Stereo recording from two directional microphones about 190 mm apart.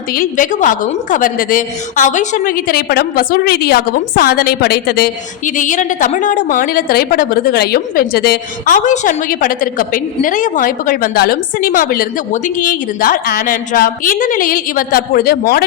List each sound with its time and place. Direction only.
0.1 s a woman's voice: 45° left (ahead or behind)